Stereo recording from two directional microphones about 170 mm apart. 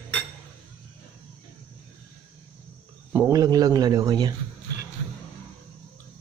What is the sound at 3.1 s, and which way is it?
Speech, 20° right (ahead or behind).